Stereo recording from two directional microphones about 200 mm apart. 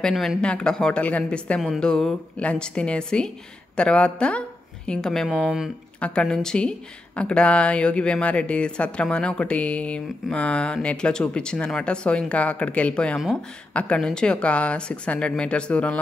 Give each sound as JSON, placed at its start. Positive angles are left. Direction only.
{"t": 0.0, "sound": "speech", "side_deg": 0}